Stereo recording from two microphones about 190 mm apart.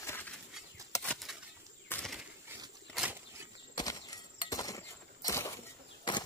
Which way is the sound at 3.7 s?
20° left (ahead or behind).